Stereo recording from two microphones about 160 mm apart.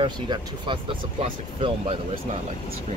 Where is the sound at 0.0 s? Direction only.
30° right (ahead or behind).